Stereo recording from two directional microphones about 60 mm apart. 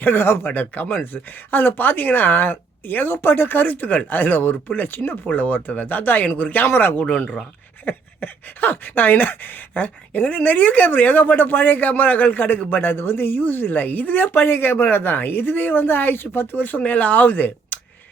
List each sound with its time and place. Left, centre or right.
0.0 s speech: left